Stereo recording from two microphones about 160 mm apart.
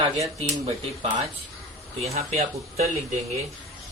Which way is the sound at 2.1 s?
40° right (ahead or behind).